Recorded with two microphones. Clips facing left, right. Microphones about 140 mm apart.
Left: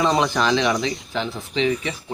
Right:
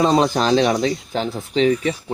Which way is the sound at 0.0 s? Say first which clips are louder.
Right 3 dB; 40° right (ahead or behind).